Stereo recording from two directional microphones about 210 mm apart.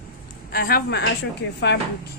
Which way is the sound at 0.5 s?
45° left (ahead or behind).